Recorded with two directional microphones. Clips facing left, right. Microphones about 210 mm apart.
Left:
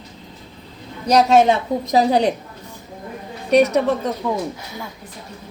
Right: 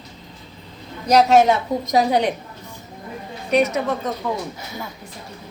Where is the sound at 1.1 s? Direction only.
30° left (ahead or behind).